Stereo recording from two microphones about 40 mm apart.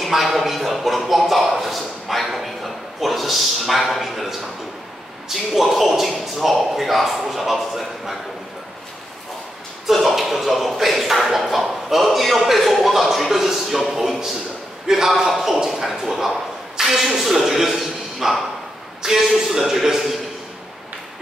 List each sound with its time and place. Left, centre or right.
0.0 s a man's voice: centre
9.9 s a man's voice: centre